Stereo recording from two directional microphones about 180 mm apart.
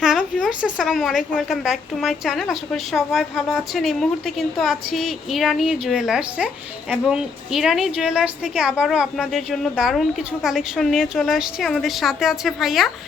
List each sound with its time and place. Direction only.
0.0 s speech: centre (ahead or behind)